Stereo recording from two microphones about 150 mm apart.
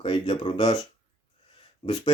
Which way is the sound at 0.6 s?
25° left (ahead or behind).